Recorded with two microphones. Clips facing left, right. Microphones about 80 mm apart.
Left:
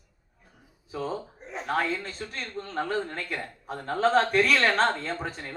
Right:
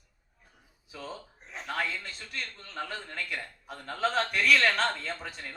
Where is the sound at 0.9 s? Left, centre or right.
Left.